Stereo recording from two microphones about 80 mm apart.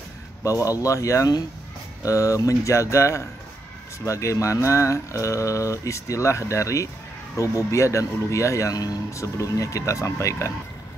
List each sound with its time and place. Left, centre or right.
0.4 s speech: left